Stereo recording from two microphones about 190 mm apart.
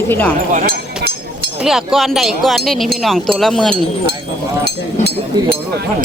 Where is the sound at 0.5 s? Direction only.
50° right (ahead or behind).